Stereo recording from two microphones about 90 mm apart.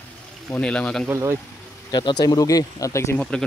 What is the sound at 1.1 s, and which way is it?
Speech, 30° right (ahead or behind).